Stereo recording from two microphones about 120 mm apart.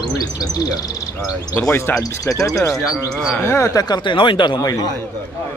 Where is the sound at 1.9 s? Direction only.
30° left (ahead or behind).